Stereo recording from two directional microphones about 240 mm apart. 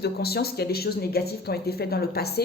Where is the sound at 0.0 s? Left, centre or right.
Left.